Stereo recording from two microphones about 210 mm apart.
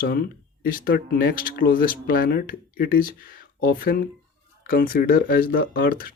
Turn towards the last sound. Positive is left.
turn(degrees=45)  # may be behind; listen again after turning